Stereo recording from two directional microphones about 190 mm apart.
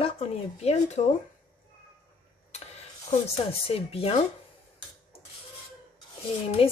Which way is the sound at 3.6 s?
30° left (ahead or behind).